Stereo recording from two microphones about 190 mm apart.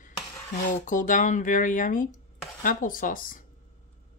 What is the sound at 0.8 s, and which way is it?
Speech, 45° left (ahead or behind).